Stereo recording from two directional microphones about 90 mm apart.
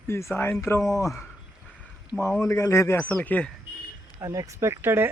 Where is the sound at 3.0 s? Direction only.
15° left (ahead or behind).